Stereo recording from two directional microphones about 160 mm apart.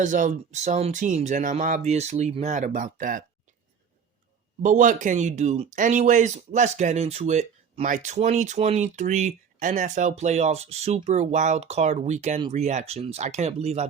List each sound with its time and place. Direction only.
0.0 s speech: 50° right (ahead or behind)
4.6 s speech: 55° right (ahead or behind)